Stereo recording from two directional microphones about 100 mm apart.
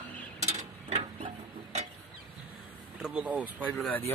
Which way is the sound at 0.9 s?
70° right (ahead or behind).